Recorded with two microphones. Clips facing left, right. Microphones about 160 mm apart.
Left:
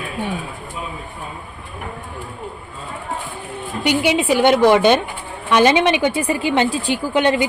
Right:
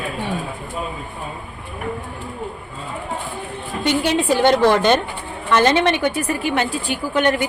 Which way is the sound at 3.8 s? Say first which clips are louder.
Left 1 dB; 10° left (ahead or behind).